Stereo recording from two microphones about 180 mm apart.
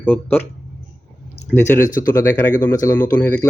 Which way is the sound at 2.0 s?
15° left (ahead or behind).